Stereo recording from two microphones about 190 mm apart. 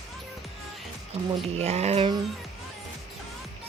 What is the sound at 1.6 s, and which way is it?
Speech, 35° right (ahead or behind).